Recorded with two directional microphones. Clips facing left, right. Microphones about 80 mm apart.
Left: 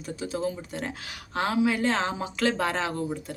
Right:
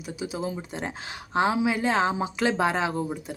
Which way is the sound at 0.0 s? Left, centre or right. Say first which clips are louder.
Left 1 dB; centre.